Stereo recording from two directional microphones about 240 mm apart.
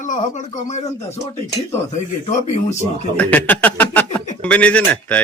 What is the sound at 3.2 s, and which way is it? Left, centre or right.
Speech, centre.